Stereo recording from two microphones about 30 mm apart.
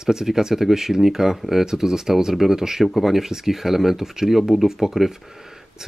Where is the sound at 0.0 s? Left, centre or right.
Centre.